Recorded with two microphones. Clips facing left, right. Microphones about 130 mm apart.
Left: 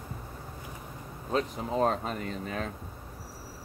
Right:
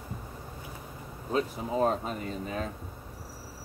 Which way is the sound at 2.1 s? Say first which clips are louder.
Even; 55° left (ahead or behind).